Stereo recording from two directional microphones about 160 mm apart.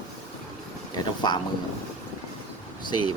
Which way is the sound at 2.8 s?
30° left (ahead or behind).